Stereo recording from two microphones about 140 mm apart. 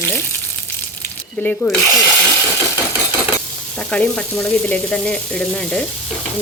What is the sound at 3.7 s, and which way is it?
Speech, 10° left (ahead or behind).